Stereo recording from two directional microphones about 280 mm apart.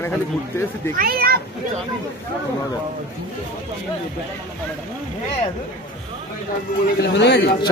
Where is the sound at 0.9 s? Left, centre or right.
Right.